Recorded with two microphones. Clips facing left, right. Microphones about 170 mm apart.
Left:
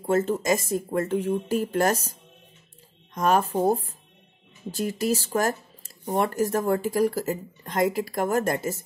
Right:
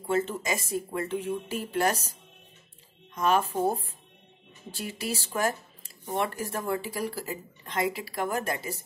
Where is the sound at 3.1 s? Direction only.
40° left (ahead or behind).